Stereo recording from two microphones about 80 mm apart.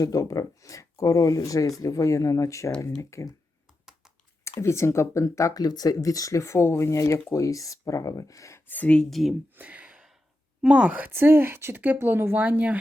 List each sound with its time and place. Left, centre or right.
0.0 s speech: left
4.6 s speech: left
8.6 s speech: left
9.0 s speech: centre
9.6 s sigh: centre
10.6 s speech: centre